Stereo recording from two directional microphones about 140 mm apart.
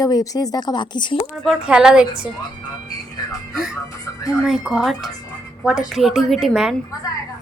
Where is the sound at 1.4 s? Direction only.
5° right (ahead or behind).